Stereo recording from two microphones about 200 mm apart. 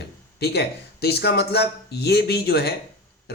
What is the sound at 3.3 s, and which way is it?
Burping, 55° left (ahead or behind).